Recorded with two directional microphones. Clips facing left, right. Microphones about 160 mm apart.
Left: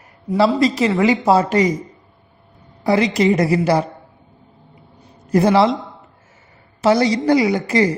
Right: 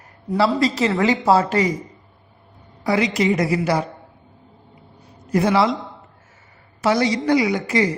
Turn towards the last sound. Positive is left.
turn(degrees=35)  # may be behind; listen again after turning